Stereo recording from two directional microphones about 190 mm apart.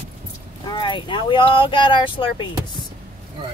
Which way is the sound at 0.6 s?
25° left (ahead or behind).